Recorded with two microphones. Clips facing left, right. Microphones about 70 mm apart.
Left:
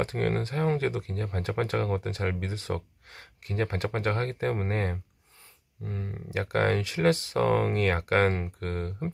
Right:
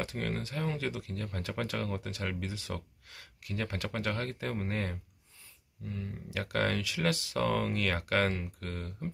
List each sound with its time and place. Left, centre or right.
0.0 s speech: left